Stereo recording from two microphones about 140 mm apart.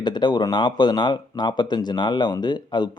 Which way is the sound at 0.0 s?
30° left (ahead or behind).